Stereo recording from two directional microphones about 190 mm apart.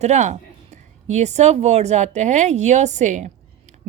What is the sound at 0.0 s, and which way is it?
A woman's voice, 35° right (ahead or behind).